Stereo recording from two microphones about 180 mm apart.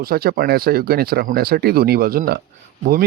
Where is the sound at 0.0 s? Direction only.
55° right (ahead or behind).